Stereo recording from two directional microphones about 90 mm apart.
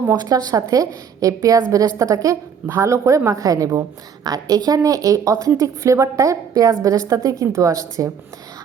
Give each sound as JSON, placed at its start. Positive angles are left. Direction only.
{"t": 0.2, "sound": "a woman's voice", "side_deg": -45}